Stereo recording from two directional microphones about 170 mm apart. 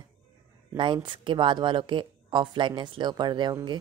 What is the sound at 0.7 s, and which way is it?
Speech, 30° right (ahead or behind).